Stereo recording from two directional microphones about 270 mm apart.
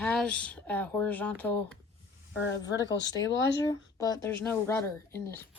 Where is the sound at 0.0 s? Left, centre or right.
Centre.